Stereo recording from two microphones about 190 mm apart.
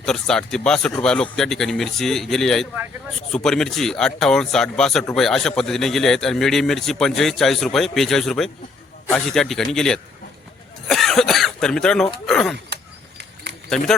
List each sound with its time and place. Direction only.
0.0 s speech: 5° left (ahead or behind)
12.7 s a sound: 65° right (ahead or behind)
13.7 s speech: 5° left (ahead or behind)